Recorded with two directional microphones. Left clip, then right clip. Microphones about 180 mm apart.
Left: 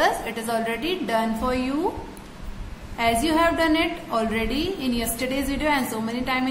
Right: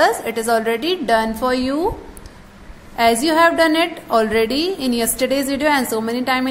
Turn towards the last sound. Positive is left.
turn(degrees=-40)  # may be behind; listen again after turning